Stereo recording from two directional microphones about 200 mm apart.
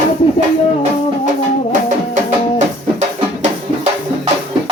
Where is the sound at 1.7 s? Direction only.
40° right (ahead or behind).